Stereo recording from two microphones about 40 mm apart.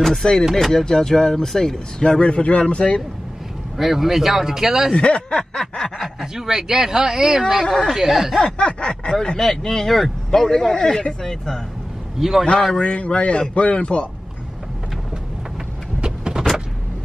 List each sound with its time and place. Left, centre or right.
0.0 s a sound: centre
0.6 s speech: centre
2.0 s speech: left
3.7 s speech: centre
4.9 s speech: left
5.6 s speech: centre
7.6 s speech: left
7.9 s speech: centre
8.5 s speech: left
9.4 s speech: centre
12.2 s speech: centre
12.7 s speech: left
16.0 s vehicle: right